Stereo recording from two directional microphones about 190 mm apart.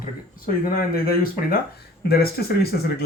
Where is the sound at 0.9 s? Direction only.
50° left (ahead or behind).